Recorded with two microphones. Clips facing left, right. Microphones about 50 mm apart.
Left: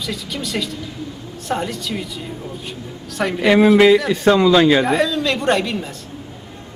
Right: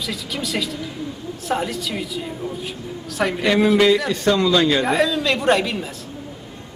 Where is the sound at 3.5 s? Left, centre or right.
Centre.